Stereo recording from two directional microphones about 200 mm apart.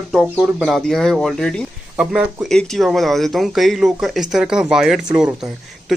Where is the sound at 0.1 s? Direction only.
Centre (ahead or behind).